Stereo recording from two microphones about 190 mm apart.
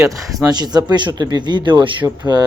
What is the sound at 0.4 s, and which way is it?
Speech, 20° right (ahead or behind).